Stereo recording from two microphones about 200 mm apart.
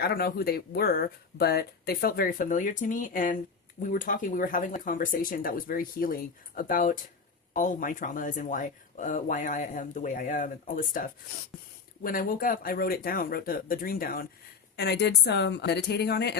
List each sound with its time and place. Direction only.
0.0 s a woman's voice: 50° left (ahead or behind)